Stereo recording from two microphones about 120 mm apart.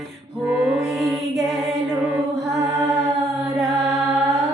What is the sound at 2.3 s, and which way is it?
Mantra, centre (ahead or behind).